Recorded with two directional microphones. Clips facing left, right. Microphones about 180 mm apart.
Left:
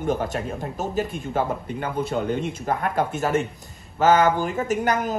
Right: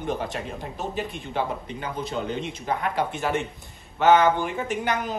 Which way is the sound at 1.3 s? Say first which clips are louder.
Left 3 dB; 55° left (ahead or behind).